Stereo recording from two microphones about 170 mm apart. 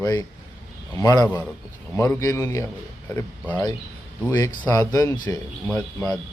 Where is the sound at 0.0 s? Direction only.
20° left (ahead or behind).